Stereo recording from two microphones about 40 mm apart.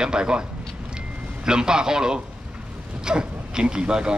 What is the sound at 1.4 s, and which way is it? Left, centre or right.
A man's voice, centre.